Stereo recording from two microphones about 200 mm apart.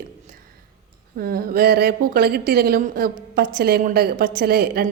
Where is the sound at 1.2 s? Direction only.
50° right (ahead or behind).